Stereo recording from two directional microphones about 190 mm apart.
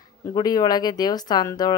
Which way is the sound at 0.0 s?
20° left (ahead or behind).